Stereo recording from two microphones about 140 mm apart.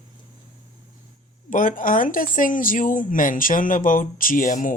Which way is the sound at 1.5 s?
75° left (ahead or behind).